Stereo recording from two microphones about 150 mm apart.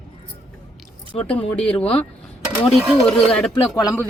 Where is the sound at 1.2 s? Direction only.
10° left (ahead or behind).